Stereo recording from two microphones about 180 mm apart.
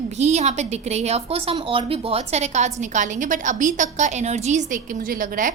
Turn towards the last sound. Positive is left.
turn(degrees=-50)  # may be behind; listen again after turning